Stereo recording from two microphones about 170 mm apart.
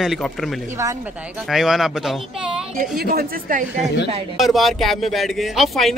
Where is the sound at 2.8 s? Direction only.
65° right (ahead or behind).